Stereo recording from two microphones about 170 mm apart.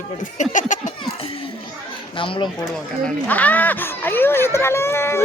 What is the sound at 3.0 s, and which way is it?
Speech, 10° left (ahead or behind).